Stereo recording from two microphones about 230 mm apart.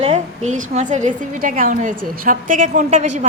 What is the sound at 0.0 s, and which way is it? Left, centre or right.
A woman's voice, right.